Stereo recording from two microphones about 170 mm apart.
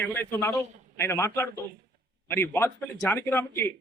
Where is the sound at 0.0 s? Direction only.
10° left (ahead or behind).